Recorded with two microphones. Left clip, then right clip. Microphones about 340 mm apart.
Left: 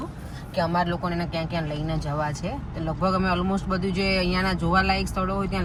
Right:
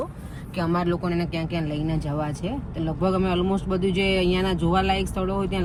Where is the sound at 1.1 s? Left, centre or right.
Left.